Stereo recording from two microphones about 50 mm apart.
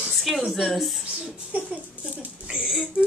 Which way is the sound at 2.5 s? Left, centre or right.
Centre.